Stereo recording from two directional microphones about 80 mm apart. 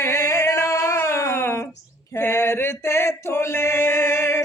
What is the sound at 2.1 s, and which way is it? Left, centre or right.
Male singing, left.